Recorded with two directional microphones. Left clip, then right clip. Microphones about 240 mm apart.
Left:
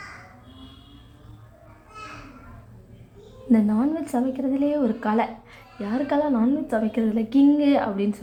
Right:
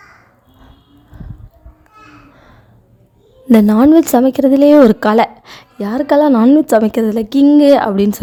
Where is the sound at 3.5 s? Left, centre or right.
Right.